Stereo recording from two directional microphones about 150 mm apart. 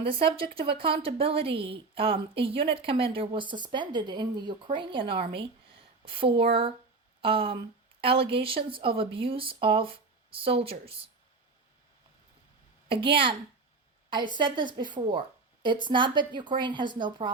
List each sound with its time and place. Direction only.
0.0 s speech: 35° right (ahead or behind)
12.9 s speech: 35° right (ahead or behind)